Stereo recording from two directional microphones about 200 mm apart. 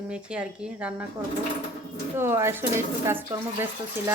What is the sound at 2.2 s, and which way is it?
Speech, 10° right (ahead or behind).